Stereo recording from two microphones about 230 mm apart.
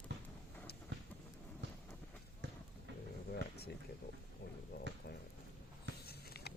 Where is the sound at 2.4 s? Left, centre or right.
Right.